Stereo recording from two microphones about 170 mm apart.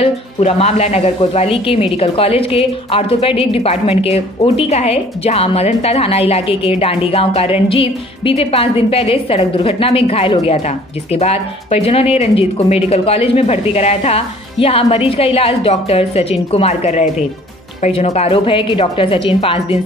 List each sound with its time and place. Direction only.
0.0 s a woman's voice: 35° left (ahead or behind)